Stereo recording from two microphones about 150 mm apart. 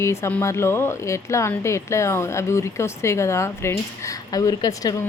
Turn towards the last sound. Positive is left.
turn(degrees=25)  # may be behind; listen again after turning